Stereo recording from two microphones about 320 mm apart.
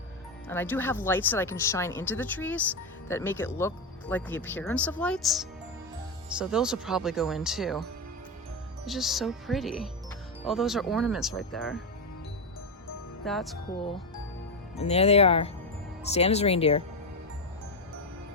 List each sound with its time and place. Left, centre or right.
0.4 s speech: centre
8.9 s speech: centre
13.2 s speech: centre
14.8 s speech: centre